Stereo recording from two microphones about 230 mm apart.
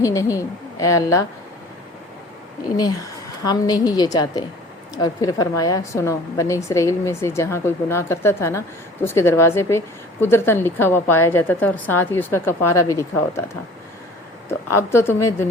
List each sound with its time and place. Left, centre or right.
0.0 s a woman's voice: centre
3.4 s a woman's voice: centre
14.8 s a woman's voice: centre